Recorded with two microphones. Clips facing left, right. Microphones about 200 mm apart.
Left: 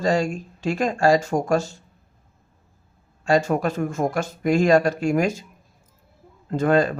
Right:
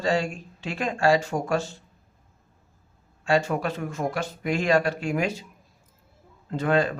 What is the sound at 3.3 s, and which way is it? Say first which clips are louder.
Speech: left 4 dB; 40° left (ahead or behind).